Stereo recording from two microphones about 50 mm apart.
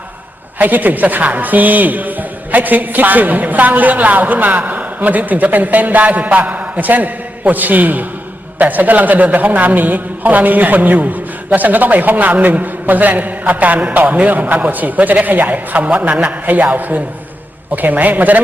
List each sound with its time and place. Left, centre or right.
0.6 s a man's voice: right